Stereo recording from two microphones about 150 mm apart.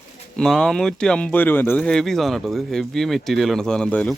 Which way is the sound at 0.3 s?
5° left (ahead or behind).